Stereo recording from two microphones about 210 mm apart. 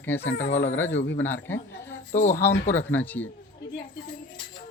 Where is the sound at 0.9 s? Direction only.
60° left (ahead or behind).